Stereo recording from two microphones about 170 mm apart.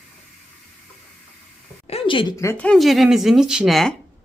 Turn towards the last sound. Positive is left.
turn(degrees=0)  # may be behind; listen again after turning